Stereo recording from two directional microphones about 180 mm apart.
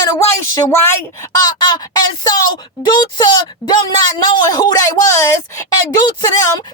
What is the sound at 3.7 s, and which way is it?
A man's voice, 25° left (ahead or behind).